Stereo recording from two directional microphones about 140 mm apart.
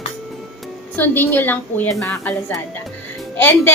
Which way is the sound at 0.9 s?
15° left (ahead or behind).